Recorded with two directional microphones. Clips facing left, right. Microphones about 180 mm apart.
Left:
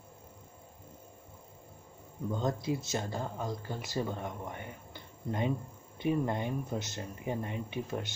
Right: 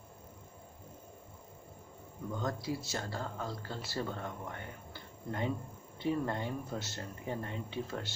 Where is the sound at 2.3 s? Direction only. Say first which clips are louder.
Left 4 dB; 20° left (ahead or behind).